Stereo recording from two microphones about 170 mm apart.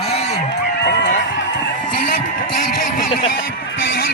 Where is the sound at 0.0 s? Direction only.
40° left (ahead or behind).